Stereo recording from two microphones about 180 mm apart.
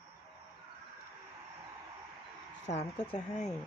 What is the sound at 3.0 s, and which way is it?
Speech, 25° left (ahead or behind).